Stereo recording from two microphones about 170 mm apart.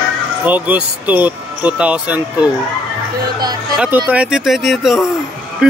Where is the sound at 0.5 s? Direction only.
10° right (ahead or behind).